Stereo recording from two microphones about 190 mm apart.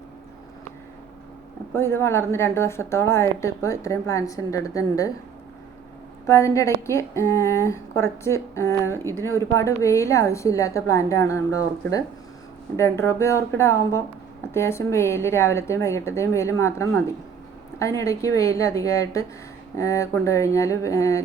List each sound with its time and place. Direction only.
1.7 s a woman's voice: 15° left (ahead or behind)
6.2 s a woman's voice: 15° left (ahead or behind)